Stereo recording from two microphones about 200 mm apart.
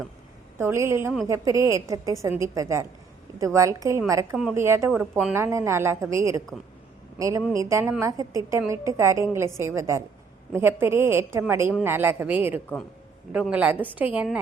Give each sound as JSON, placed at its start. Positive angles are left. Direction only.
{"t": 0.6, "sound": "a woman's voice", "side_deg": -15}